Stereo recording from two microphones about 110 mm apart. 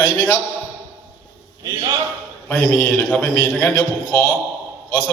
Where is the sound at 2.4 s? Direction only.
10° left (ahead or behind).